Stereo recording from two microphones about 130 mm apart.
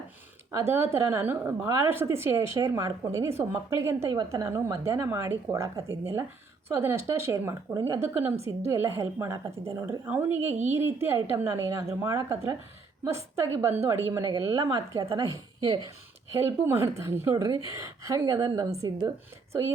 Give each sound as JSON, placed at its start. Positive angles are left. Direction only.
{"t": 0.5, "sound": "a woman's voice", "side_deg": -20}
{"t": 16.3, "sound": "speech", "side_deg": -20}